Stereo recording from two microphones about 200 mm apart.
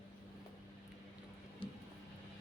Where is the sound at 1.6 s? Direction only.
25° left (ahead or behind).